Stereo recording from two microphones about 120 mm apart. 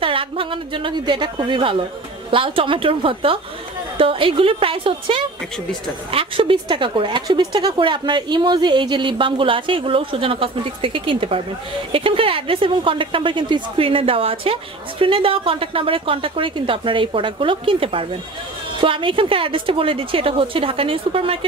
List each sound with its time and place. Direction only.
0.0 s a woman's voice: 45° right (ahead or behind)